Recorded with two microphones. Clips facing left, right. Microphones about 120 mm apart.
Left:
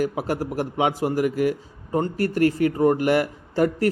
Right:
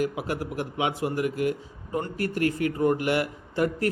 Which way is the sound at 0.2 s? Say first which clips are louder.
Left 5 dB; 40° left (ahead or behind).